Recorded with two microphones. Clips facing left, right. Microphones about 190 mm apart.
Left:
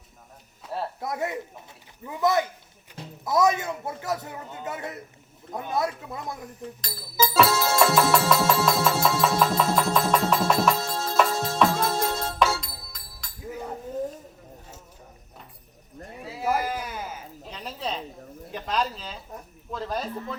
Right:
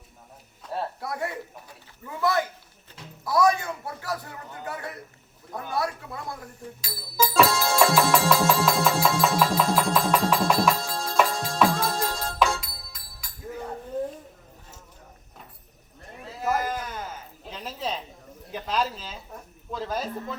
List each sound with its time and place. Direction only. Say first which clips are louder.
0.6 s music: even; centre (ahead or behind)
1.0 s a man's voice: left 2 dB; 20° left (ahead or behind)
6.8 s music: even; 5° right (ahead or behind)
7.4 s music: even; 5° left (ahead or behind)
16.2 s a sound: even; 10° left (ahead or behind)